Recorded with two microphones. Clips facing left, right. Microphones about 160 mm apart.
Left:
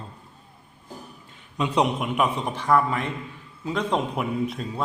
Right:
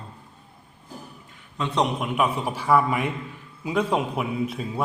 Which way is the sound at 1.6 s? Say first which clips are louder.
Left 1 dB; 5° left (ahead or behind).